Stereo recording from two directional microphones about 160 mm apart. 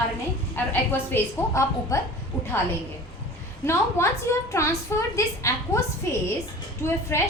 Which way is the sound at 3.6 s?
15° left (ahead or behind).